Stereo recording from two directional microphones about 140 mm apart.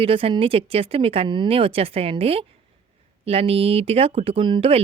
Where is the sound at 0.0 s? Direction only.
40° right (ahead or behind).